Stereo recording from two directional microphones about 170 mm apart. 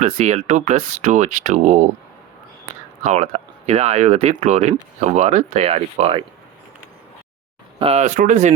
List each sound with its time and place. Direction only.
0.0 s speech: 40° right (ahead or behind)
3.0 s speech: 45° right (ahead or behind)
7.8 s speech: 40° right (ahead or behind)